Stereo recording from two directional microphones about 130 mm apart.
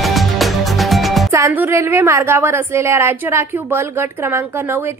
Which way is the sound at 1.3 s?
20° right (ahead or behind).